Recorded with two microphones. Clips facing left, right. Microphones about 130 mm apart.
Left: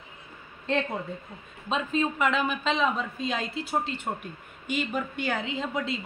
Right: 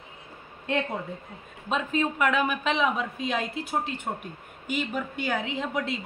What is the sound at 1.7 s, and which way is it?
A man's voice, 10° right (ahead or behind).